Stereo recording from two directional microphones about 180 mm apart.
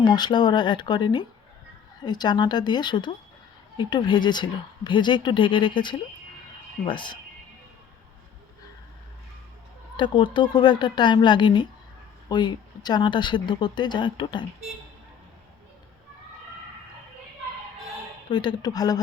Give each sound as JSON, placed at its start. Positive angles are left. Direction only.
{"t": 0.0, "sound": "a woman's voice", "side_deg": 25}
{"t": 10.0, "sound": "a woman's voice", "side_deg": 25}
{"t": 18.3, "sound": "a woman's voice", "side_deg": 25}